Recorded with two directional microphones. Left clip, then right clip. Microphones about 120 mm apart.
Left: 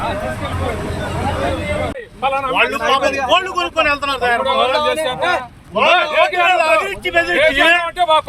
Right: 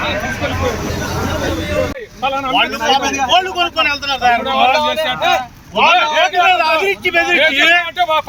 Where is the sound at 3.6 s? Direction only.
30° left (ahead or behind).